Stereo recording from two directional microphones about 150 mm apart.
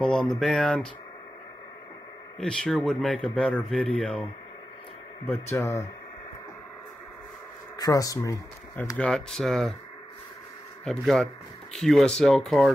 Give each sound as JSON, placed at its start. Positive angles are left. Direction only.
{"t": 0.0, "sound": "speech", "side_deg": 5}
{"t": 2.3, "sound": "speech", "side_deg": 5}
{"t": 5.2, "sound": "speech", "side_deg": 15}
{"t": 7.7, "sound": "speech", "side_deg": 25}
{"t": 8.9, "sound": "speech", "side_deg": 5}
{"t": 10.9, "sound": "speech", "side_deg": 5}